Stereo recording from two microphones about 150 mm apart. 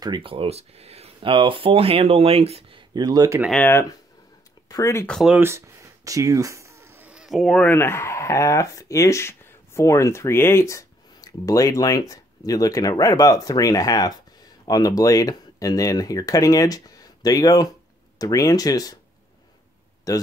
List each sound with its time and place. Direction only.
0.0 s speech: 35° right (ahead or behind)
2.9 s speech: 25° right (ahead or behind)
4.6 s speech: 20° left (ahead or behind)
5.0 s speech: 5° left (ahead or behind)
5.3 s speech: 15° right (ahead or behind); by 18.9 s 25° left (ahead or behind)
20.1 s speech: 20° left (ahead or behind)